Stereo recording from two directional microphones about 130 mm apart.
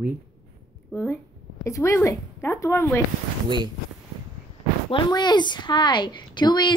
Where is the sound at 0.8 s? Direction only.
5° left (ahead or behind).